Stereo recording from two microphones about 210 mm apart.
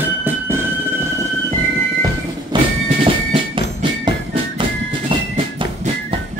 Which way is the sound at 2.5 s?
20° right (ahead or behind).